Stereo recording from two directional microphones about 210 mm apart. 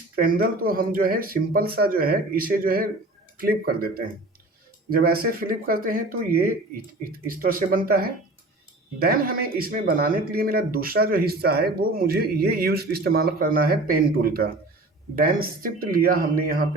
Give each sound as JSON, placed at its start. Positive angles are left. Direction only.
{"t": 0.2, "sound": "speech", "side_deg": -45}